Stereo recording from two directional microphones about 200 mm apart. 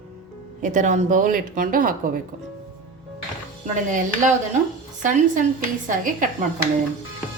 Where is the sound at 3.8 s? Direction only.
40° right (ahead or behind).